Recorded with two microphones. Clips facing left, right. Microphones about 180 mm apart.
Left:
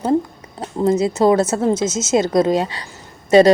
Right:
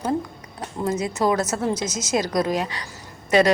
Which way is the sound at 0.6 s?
30° left (ahead or behind).